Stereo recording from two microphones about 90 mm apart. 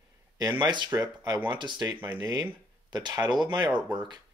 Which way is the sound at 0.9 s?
45° right (ahead or behind).